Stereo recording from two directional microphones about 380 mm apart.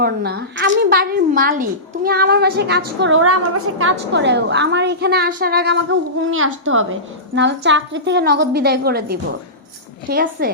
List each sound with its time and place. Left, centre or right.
0.0 s a woman's voice: right